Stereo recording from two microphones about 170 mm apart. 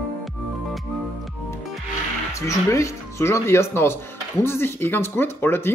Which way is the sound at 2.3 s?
15° left (ahead or behind).